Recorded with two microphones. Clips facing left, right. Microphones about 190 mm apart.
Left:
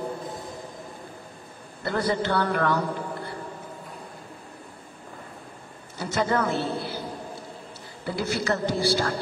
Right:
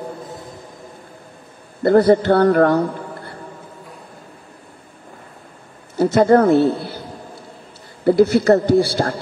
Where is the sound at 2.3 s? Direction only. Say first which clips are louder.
Right 11 dB; 40° right (ahead or behind).